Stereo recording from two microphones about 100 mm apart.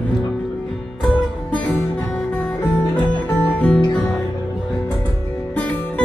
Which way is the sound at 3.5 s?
10° left (ahead or behind).